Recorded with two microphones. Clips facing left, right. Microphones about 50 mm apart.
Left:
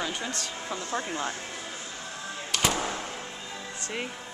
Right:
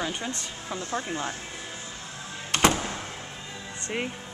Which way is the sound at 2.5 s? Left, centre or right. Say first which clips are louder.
Right 6 dB; right.